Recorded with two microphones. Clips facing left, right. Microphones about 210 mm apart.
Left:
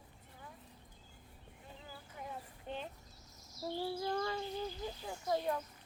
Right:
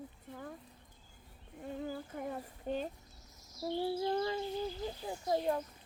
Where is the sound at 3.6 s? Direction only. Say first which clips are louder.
Right 4 dB; 20° right (ahead or behind).